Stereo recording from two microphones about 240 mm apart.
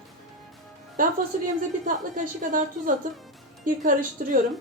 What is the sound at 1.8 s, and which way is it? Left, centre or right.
Speech, right.